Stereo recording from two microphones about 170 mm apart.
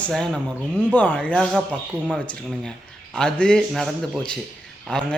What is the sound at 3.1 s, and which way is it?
Speech, 5° left (ahead or behind).